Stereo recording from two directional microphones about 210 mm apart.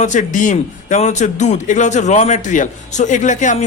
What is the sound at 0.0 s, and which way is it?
A man's voice, 35° left (ahead or behind).